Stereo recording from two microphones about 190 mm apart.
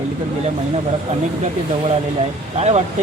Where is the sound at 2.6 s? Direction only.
35° right (ahead or behind).